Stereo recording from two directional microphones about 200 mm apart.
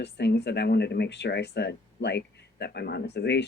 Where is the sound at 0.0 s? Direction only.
55° left (ahead or behind).